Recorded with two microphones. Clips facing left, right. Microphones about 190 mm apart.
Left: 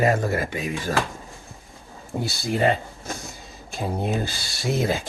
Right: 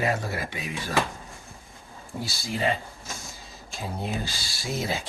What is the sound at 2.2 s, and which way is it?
Speech, 55° left (ahead or behind).